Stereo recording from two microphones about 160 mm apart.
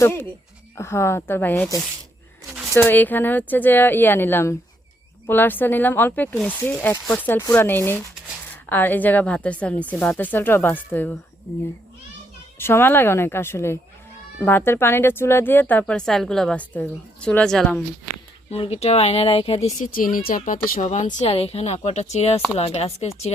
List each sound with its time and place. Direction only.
0.0 s speech: 15° left (ahead or behind)
2.7 s speech: 10° left (ahead or behind)
12.5 s speech: 15° left (ahead or behind)
18.5 s speech: 40° left (ahead or behind)
19.9 s speech: 60° left (ahead or behind); by 23.3 s 40° left (ahead or behind)